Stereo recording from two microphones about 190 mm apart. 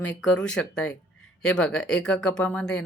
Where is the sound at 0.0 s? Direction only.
5° left (ahead or behind).